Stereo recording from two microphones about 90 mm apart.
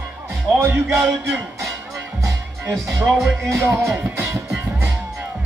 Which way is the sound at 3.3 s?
30° right (ahead or behind).